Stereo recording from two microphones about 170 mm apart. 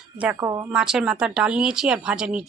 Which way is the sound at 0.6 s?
5° right (ahead or behind).